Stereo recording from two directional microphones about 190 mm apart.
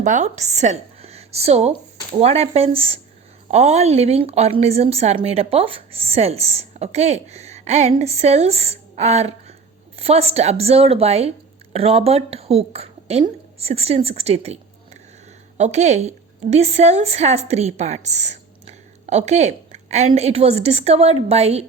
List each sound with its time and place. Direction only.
0.0 s a woman's voice: 40° right (ahead or behind)